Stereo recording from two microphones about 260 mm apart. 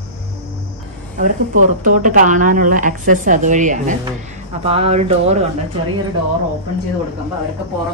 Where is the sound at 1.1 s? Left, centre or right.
Right.